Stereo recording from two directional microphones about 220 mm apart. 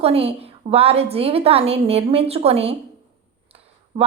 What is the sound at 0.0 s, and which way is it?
A woman's voice, 25° right (ahead or behind).